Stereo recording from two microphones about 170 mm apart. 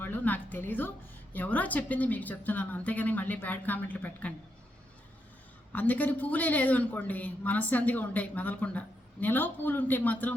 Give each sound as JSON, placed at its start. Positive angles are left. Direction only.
{"t": 0.0, "sound": "a woman's voice", "side_deg": 10}
{"t": 5.7, "sound": "a woman's voice", "side_deg": 10}